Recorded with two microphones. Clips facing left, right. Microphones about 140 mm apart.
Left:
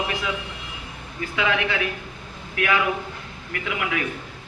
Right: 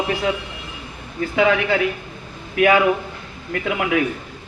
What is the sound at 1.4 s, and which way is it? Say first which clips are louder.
A man's voice: right 7 dB; 45° right (ahead or behind).